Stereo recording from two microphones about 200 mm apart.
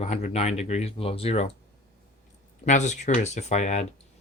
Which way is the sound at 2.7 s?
35° left (ahead or behind).